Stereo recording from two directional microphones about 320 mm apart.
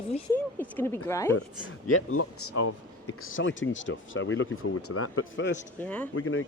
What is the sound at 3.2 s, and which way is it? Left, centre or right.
Speech, left.